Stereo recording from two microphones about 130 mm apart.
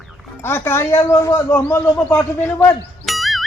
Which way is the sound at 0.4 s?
20° left (ahead or behind).